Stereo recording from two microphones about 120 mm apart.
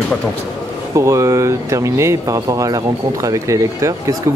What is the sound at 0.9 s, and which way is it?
Speech, 25° right (ahead or behind).